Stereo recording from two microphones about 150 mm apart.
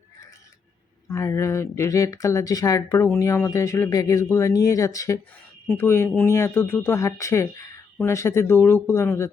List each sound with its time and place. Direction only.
1.0 s speech: 20° left (ahead or behind)